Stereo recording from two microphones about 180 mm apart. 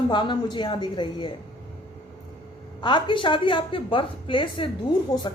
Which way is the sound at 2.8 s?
25° left (ahead or behind).